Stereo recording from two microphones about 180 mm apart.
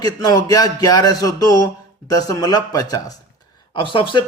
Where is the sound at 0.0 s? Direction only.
20° left (ahead or behind).